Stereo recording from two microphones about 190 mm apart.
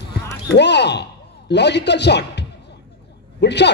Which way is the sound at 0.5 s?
65° left (ahead or behind).